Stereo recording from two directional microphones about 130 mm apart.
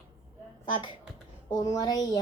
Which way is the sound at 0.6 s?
40° left (ahead or behind).